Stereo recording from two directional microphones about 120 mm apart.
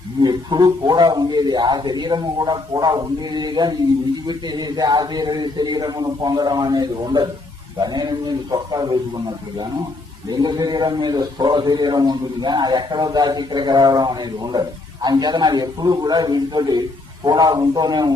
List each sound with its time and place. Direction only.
0.2 s a man's voice: 35° right (ahead or behind)